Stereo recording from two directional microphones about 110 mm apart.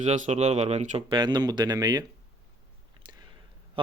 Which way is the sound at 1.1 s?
45° right (ahead or behind).